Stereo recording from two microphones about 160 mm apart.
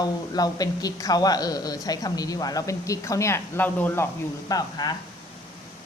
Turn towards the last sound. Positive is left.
turn(degrees=25)  # may be behind; listen again after turning